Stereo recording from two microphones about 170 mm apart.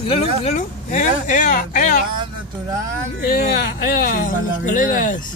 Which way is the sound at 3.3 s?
65° left (ahead or behind).